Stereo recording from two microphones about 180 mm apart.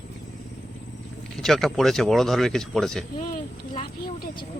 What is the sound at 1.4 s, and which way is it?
Speech, centre (ahead or behind).